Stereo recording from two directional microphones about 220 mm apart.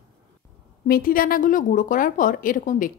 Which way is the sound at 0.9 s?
40° left (ahead or behind).